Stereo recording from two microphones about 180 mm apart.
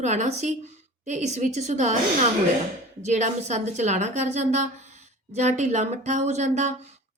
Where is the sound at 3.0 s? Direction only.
40° right (ahead or behind).